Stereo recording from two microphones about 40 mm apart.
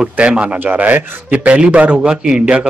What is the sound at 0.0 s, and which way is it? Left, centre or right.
A man's voice, right.